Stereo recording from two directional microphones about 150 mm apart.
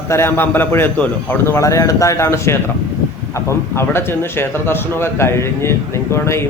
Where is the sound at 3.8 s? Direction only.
15° left (ahead or behind).